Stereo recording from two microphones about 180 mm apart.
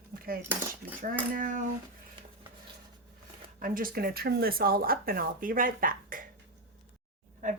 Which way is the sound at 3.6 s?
50° right (ahead or behind).